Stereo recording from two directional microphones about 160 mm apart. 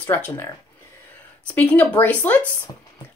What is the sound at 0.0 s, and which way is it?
Speech, 10° left (ahead or behind).